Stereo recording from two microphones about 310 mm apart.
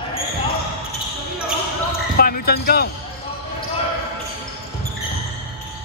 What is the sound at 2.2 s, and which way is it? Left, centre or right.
Basketball bounce, left.